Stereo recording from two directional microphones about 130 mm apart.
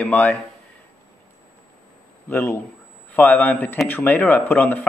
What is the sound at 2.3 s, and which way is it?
A man's voice, 15° left (ahead or behind).